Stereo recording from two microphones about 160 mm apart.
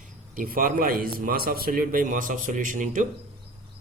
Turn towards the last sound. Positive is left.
turn(degrees=-55)  # may be behind; listen again after turning